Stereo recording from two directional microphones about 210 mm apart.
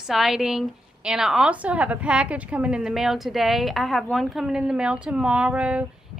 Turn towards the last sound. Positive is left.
turn(degrees=-5)  # may be behind; listen again after turning